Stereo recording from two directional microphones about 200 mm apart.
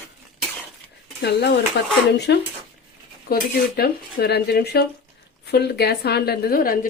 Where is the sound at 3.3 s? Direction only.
50° left (ahead or behind).